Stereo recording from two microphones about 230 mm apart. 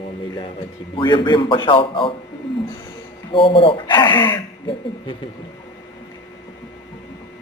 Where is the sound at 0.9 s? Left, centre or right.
Centre.